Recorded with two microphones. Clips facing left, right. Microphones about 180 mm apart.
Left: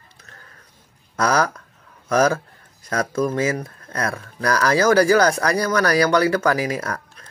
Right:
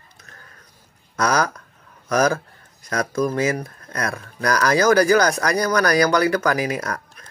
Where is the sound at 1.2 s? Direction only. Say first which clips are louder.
Left 1 dB; 30° left (ahead or behind).